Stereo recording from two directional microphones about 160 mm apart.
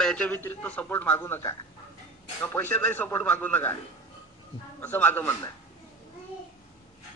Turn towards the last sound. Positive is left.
turn(degrees=10)  # may be behind; listen again after turning